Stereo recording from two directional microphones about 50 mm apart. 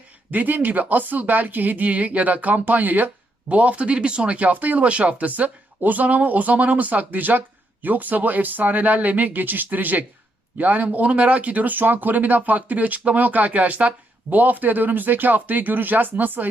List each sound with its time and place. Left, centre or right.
0.3 s speech: right